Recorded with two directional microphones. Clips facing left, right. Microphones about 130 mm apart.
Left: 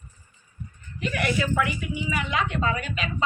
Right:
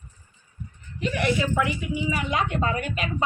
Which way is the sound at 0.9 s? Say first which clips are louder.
Right 2 dB; 30° right (ahead or behind).